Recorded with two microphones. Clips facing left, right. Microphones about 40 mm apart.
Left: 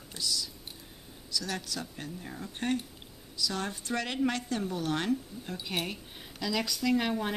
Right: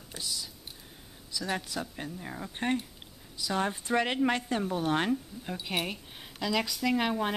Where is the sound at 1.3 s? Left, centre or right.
Right.